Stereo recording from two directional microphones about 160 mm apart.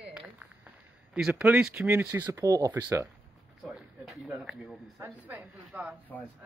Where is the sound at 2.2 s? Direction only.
25° right (ahead or behind).